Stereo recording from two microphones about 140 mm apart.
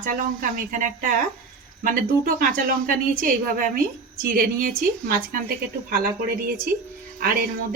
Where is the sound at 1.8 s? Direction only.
80° right.